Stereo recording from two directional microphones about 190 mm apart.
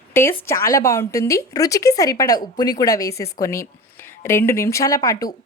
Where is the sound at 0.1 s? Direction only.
15° left (ahead or behind).